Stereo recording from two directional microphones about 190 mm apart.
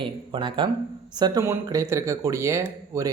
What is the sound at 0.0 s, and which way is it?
Speech, 25° right (ahead or behind).